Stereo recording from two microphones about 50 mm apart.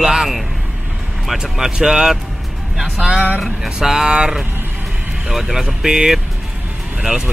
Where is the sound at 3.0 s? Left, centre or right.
Right.